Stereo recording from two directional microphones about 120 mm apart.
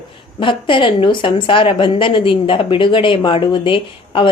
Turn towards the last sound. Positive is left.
turn(degrees=45)  # may be behind; listen again after turning